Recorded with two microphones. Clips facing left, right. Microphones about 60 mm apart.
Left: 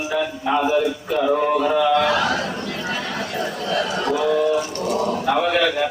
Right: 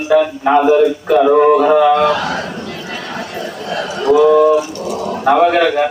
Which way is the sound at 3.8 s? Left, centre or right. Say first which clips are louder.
Right 9 dB; centre.